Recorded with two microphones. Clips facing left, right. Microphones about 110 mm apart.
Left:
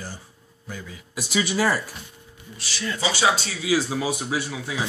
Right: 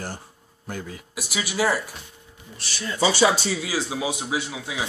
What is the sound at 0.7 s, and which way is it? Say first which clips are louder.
Speech: right 4 dB; 50° right (ahead or behind).